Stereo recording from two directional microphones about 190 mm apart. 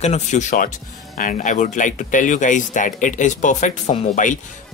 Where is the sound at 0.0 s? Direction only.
35° left (ahead or behind).